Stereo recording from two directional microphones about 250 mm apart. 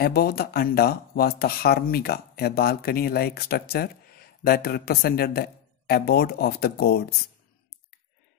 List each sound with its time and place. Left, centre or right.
0.0 s speech: left